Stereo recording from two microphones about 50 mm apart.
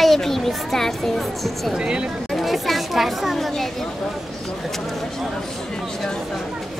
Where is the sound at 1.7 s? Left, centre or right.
Centre.